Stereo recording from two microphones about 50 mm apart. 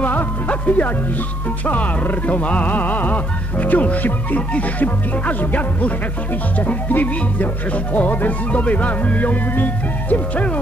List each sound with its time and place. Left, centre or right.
0.0 s music: left